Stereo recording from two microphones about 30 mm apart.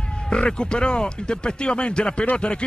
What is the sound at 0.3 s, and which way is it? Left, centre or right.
A man's voice, left.